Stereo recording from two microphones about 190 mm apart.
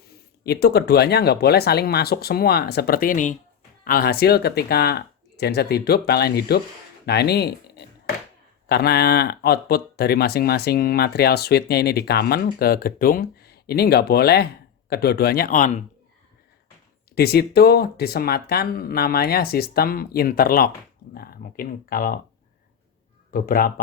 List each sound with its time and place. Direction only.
0.4 s speech: 55° left (ahead or behind)
7.0 s a sound: 60° left (ahead or behind)
8.6 s speech: 55° left (ahead or behind)
17.2 s speech: 55° left (ahead or behind)
23.3 s speech: 50° left (ahead or behind)